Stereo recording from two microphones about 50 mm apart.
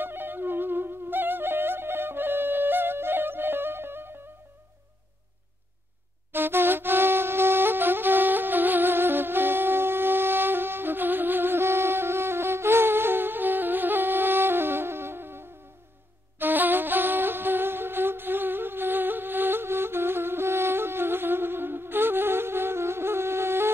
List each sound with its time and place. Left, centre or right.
0.0 s music: right
6.3 s flute: right